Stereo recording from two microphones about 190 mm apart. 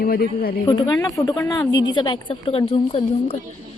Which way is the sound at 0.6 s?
20° left (ahead or behind).